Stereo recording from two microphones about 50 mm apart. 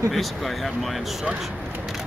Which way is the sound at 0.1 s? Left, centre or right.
Centre.